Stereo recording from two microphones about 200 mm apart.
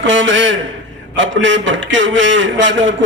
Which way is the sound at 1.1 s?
65° right (ahead or behind).